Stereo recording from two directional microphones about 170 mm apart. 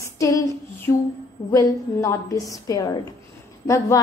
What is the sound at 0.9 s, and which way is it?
Humming, 15° left (ahead or behind).